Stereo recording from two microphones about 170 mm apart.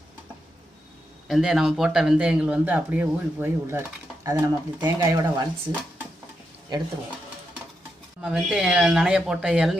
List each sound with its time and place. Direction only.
1.3 s speech: 5° right (ahead or behind); by 5.5 s 25° right (ahead or behind)
8.2 s speech: 5° right (ahead or behind)